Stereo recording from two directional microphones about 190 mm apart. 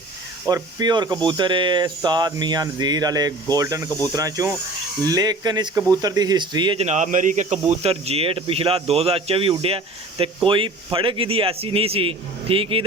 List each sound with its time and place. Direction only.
0.4 s speech: 20° right (ahead or behind)
6.8 s speech: 40° right (ahead or behind)